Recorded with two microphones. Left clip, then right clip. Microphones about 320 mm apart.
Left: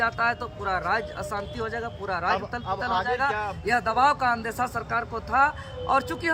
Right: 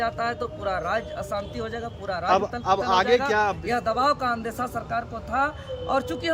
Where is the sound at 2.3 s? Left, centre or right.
Right.